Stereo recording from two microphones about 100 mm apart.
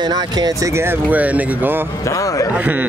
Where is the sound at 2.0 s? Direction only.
35° left (ahead or behind).